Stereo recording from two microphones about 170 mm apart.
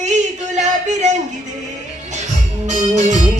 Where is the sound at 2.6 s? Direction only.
45° right (ahead or behind).